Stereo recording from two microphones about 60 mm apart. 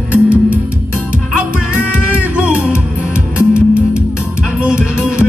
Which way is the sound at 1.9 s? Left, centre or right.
Centre.